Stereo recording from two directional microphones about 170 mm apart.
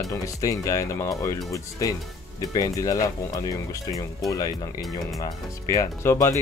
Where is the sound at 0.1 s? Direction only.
20° left (ahead or behind).